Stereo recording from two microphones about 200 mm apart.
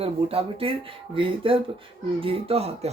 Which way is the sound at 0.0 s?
30° right (ahead or behind).